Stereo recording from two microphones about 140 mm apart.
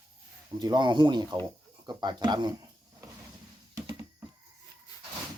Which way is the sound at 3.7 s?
20° right (ahead or behind).